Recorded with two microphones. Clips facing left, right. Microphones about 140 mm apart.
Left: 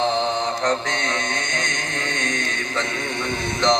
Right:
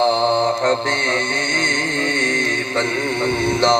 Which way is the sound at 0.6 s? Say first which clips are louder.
Right 4 dB; 30° right (ahead or behind).